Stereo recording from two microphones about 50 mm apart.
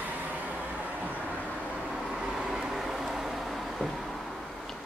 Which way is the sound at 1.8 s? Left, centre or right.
Centre.